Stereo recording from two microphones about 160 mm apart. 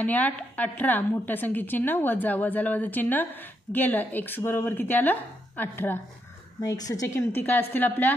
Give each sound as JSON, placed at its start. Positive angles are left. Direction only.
{"t": 0.0, "sound": "a woman's voice", "side_deg": 10}
{"t": 6.6, "sound": "a woman's voice", "side_deg": 25}